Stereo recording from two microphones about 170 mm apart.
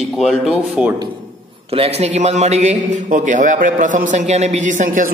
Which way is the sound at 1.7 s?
35° right (ahead or behind).